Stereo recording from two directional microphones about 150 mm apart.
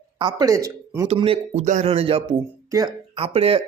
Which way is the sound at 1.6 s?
55° right (ahead or behind).